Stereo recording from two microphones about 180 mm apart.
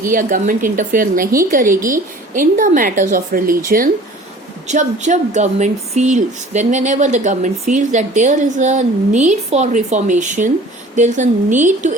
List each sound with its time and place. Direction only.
0.1 s a woman's voice: 50° right (ahead or behind)
4.7 s a woman's voice: 40° right (ahead or behind)